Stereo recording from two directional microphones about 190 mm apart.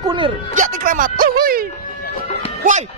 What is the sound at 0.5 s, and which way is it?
Speech, 45° right (ahead or behind).